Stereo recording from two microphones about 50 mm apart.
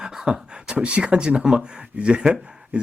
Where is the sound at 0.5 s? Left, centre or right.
Centre.